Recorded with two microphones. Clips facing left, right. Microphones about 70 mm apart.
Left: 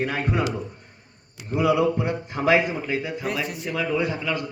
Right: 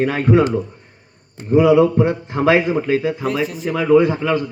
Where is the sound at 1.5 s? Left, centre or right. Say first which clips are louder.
Right 9 dB; right.